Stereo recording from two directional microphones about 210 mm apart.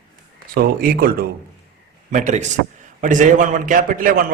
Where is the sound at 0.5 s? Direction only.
45° right (ahead or behind).